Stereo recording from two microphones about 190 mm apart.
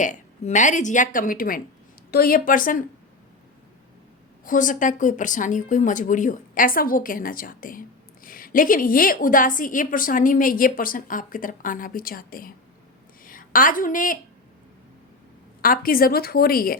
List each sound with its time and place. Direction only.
0.0 s speech: 40° left (ahead or behind)
4.4 s a woman's voice: 45° left (ahead or behind)
15.6 s speech: 50° left (ahead or behind)